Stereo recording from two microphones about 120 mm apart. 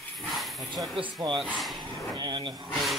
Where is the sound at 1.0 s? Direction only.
40° right (ahead or behind).